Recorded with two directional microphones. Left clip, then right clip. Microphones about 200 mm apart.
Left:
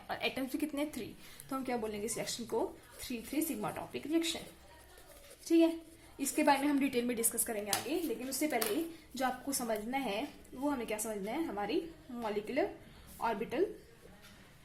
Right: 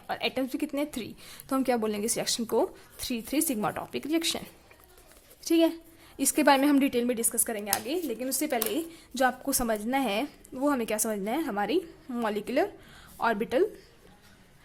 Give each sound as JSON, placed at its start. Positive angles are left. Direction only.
{"t": 0.1, "sound": "a woman's voice", "side_deg": -25}
{"t": 5.5, "sound": "a woman's voice", "side_deg": -35}